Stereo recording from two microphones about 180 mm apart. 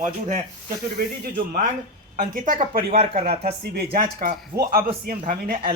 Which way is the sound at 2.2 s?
50° right (ahead or behind).